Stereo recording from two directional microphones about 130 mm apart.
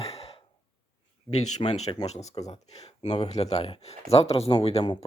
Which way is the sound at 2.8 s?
60° left (ahead or behind).